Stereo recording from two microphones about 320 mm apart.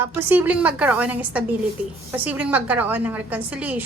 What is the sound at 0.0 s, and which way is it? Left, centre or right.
A woman's voice, centre.